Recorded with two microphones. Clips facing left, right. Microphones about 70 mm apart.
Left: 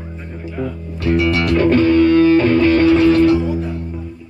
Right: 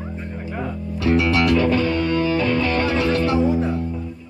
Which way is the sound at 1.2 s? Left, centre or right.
Left.